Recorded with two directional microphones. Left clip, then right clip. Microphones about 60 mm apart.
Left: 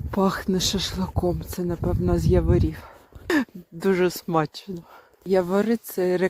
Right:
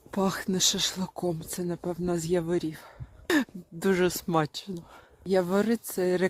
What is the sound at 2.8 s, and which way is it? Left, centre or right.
Whispering, left.